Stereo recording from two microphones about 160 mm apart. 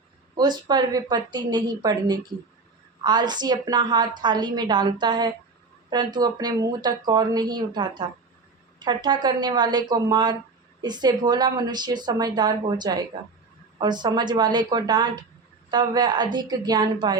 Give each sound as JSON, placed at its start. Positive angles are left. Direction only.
{"t": 0.3, "sound": "a woman's voice", "side_deg": -25}